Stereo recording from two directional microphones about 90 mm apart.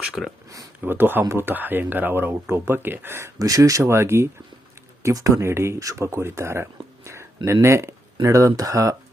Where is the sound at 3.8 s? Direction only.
30° right (ahead or behind).